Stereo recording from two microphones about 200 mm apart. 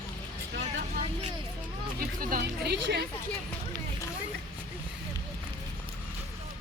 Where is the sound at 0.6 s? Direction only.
35° right (ahead or behind).